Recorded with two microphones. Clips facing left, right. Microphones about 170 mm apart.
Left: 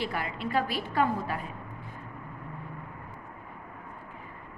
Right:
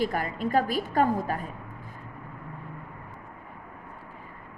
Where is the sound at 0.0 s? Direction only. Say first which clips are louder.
Right 5 dB; 45° right (ahead or behind).